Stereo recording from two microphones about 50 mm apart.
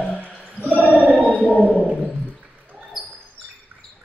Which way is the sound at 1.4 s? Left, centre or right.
Left.